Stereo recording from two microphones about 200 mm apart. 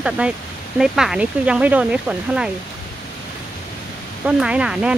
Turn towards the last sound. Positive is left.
turn(degrees=-5)  # may be behind; listen again after turning